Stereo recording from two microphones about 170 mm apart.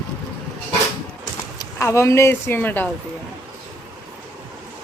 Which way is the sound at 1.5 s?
15° left (ahead or behind).